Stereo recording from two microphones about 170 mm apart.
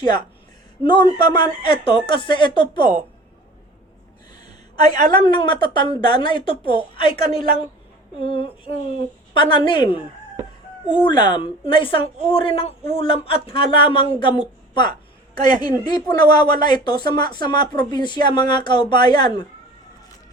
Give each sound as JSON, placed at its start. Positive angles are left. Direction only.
{"t": 0.0, "sound": "speech", "side_deg": 25}
{"t": 5.1, "sound": "a woman's voice", "side_deg": 25}
{"t": 8.2, "sound": "a woman's voice", "side_deg": 30}